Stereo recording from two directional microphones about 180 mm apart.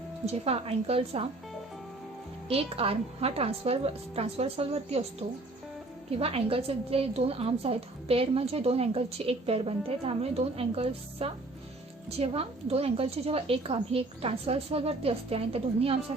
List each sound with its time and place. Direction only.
0.3 s a woman's voice: 35° right (ahead or behind)
2.5 s a woman's voice: 35° right (ahead or behind)
6.1 s a woman's voice: 35° right (ahead or behind)